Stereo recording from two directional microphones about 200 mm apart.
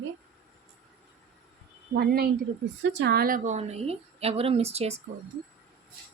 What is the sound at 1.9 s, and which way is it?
A woman's voice, 50° right (ahead or behind).